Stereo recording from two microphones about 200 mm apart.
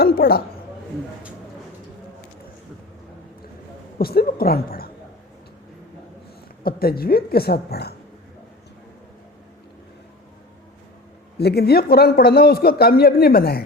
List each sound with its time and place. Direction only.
0.0 s a sound: 50° left (ahead or behind)
3.9 s a woman's voice: 50° left (ahead or behind)
6.6 s speech: 50° left (ahead or behind)
11.3 s speech: 55° left (ahead or behind)